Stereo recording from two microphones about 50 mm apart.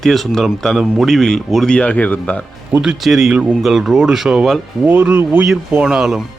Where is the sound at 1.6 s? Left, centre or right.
Left.